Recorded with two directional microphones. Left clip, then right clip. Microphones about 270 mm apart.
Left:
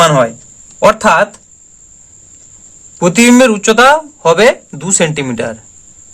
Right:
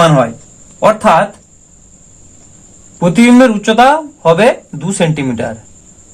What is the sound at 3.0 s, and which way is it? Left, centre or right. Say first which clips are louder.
A man's voice: even; left.